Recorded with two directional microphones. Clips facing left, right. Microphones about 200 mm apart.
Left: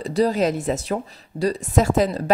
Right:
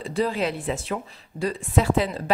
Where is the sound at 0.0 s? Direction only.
40° left (ahead or behind).